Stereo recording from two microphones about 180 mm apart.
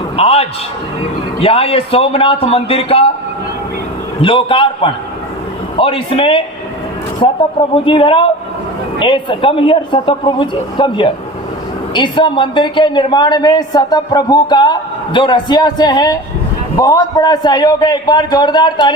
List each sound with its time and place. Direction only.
0.2 s a sound: 35° left (ahead or behind)
1.4 s a man's voice: 30° left (ahead or behind)
4.2 s a man's voice: 30° left (ahead or behind)